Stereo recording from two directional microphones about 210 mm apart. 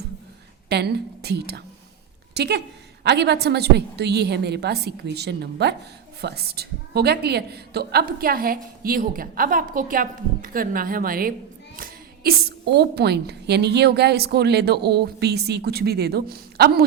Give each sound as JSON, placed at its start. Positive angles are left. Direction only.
{"t": 0.7, "sound": "a woman's voice", "side_deg": -50}